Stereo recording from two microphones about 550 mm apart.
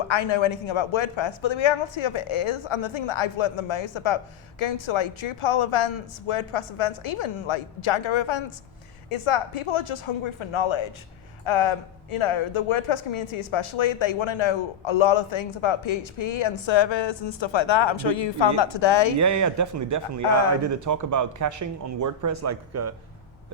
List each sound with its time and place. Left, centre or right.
0.1 s speech: left
19.2 s speech: right